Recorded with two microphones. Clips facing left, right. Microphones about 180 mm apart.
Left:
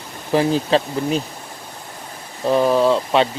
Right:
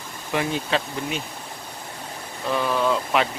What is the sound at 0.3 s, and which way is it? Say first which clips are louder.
Speech: left 8 dB; 35° left (ahead or behind).